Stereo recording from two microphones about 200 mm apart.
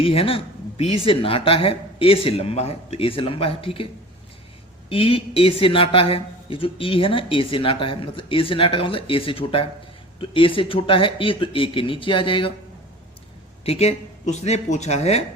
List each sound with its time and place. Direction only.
0.0 s a woman's voice: 30° left (ahead or behind)
4.9 s a woman's voice: 30° left (ahead or behind)
13.7 s speech: 35° left (ahead or behind)